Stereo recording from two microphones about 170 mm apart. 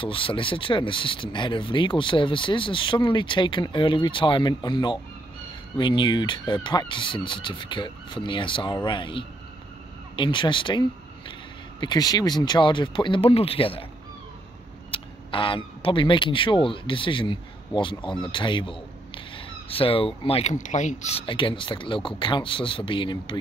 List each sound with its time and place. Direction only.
0.0 s speech: 30° left (ahead or behind)
14.9 s speech: 30° left (ahead or behind)
21.3 s speech: 30° left (ahead or behind)